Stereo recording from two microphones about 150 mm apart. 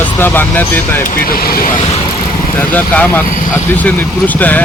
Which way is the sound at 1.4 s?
80° left.